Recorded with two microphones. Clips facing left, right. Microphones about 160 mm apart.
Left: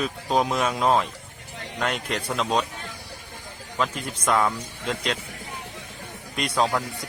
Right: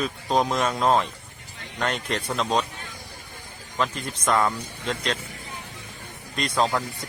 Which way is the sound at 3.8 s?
5° left (ahead or behind).